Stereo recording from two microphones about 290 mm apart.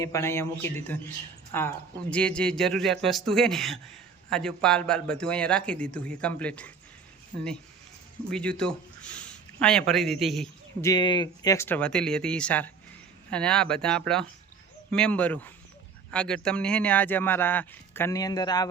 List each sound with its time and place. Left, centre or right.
0.0 s speech: centre
8.3 s speech: centre